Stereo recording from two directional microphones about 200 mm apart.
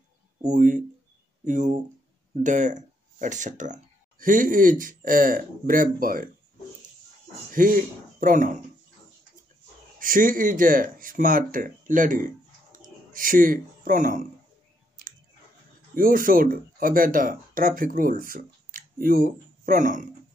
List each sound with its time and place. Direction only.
0.4 s speech: 40° right (ahead or behind)
7.5 s speech: 45° right (ahead or behind)
9.9 s speech: 45° right (ahead or behind)
15.9 s speech: 45° right (ahead or behind)